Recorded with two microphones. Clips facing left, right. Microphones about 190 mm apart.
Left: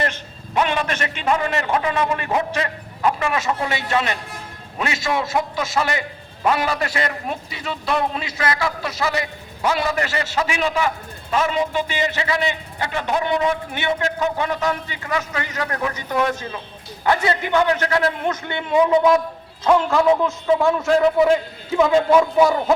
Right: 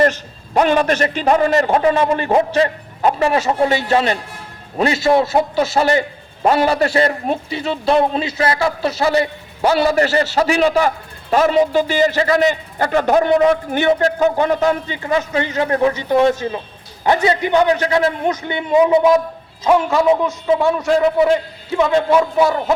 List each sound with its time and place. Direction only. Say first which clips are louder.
0.0 s a man's voice: right 9 dB; 40° right (ahead or behind); by 21.3 s centre (ahead or behind)
22.4 s a man's voice: even; 5° right (ahead or behind)